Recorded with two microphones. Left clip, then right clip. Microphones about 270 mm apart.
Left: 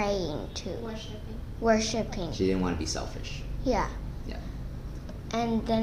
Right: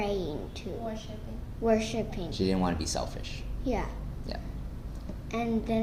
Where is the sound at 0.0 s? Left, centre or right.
Centre.